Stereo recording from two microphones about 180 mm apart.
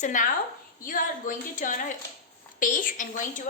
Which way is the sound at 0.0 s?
45° left (ahead or behind).